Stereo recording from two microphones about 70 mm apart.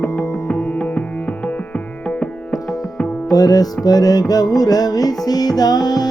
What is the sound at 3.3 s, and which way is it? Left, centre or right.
Music, left.